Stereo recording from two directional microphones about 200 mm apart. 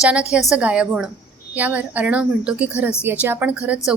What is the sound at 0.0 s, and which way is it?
A woman's voice, 5° right (ahead or behind).